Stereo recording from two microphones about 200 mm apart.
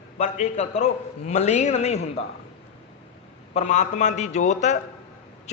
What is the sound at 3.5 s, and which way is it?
A man's voice, 35° left (ahead or behind).